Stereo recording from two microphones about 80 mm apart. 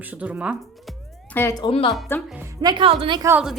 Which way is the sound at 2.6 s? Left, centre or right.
Right.